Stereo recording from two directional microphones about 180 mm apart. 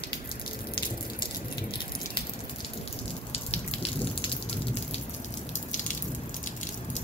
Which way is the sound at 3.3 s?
35° left (ahead or behind).